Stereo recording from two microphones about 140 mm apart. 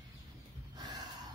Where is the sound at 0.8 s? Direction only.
30° right (ahead or behind).